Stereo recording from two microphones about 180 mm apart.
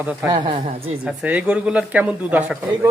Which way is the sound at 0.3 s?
25° right (ahead or behind).